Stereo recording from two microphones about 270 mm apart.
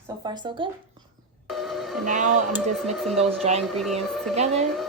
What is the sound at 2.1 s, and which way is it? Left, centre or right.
Speech, right.